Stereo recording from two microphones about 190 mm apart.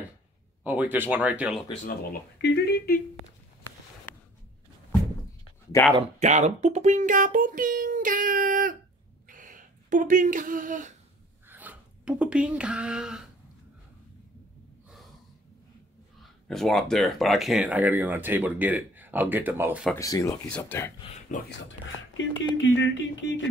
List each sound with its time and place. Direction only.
0.7 s speech: 10° right (ahead or behind)
2.4 s speech: 60° left (ahead or behind)
6.1 s speech: 35° right (ahead or behind)
11.4 s speech: 10° right (ahead or behind)
16.2 s speech: centre (ahead or behind)
20.0 s speech: 20° left (ahead or behind)
22.1 s speech: 75° left (ahead or behind)